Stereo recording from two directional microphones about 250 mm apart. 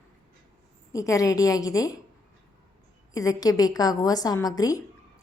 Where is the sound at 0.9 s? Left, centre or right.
Centre.